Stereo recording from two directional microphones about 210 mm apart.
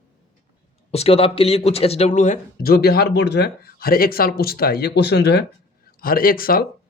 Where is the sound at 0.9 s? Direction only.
30° left (ahead or behind).